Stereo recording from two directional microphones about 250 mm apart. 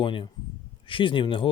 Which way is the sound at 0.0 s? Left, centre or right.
Left.